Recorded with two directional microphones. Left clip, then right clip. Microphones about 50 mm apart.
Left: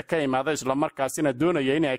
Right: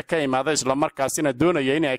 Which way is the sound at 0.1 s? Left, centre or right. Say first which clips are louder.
Right 3 dB; centre.